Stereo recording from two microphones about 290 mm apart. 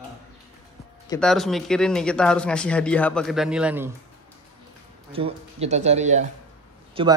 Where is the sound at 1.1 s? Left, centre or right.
Centre.